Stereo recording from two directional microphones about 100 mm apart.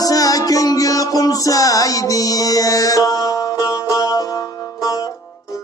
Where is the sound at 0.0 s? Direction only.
35° left (ahead or behind).